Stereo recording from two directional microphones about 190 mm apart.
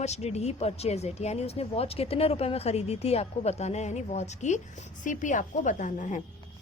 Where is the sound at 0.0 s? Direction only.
35° left (ahead or behind).